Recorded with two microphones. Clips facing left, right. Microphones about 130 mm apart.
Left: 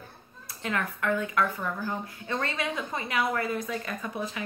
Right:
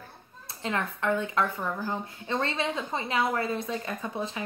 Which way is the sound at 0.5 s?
25° right (ahead or behind).